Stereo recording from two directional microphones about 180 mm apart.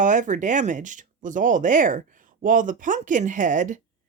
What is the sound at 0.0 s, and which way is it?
Speech, 45° right (ahead or behind).